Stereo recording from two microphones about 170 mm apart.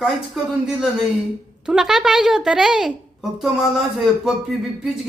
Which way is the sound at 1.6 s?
5° right (ahead or behind).